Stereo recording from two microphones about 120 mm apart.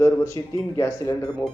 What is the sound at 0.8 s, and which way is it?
Speech, 25° left (ahead or behind).